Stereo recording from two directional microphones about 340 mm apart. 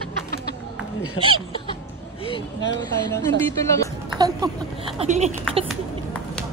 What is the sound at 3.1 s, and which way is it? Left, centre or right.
Speech, centre.